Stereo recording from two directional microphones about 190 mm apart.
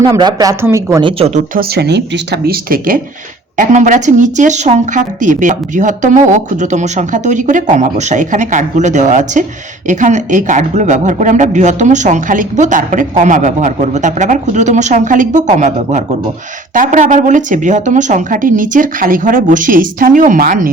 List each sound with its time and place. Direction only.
0.0 s speech: 20° right (ahead or behind)
1.0 s speech: 30° right (ahead or behind)
1.5 s speech: 60° right (ahead or behind)